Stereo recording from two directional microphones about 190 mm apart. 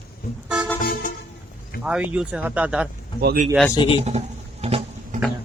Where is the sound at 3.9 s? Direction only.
35° right (ahead or behind).